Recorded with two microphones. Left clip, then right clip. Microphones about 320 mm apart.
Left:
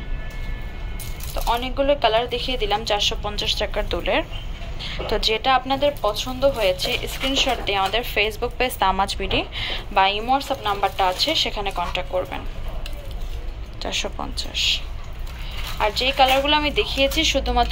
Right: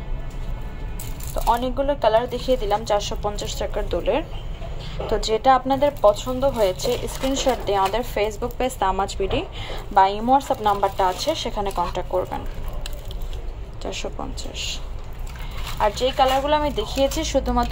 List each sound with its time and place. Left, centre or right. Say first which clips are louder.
1.3 s speech: right 2 dB; centre
13.8 s speech: left 3 dB; centre
15.8 s speech: left 1 dB; centre